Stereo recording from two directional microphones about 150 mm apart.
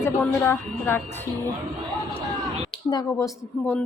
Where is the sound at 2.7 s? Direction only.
30° left (ahead or behind).